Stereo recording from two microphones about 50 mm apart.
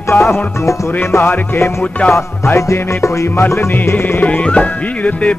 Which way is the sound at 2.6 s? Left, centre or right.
Left.